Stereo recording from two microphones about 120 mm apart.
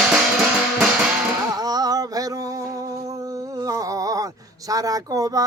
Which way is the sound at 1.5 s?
30° right (ahead or behind).